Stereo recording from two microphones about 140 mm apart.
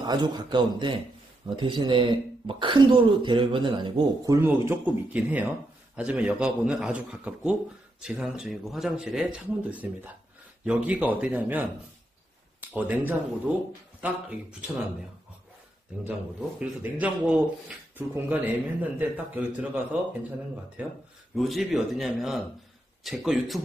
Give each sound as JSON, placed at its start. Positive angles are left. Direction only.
{"t": 0.0, "sound": "speech", "side_deg": -30}
{"t": 4.4, "sound": "speech", "side_deg": -15}
{"t": 17.0, "sound": "speech", "side_deg": -10}